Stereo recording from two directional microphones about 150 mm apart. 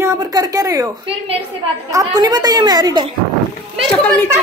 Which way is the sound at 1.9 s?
25° right (ahead or behind).